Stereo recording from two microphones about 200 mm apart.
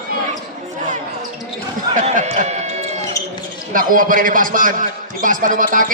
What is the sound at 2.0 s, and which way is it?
Speech, 35° right (ahead or behind).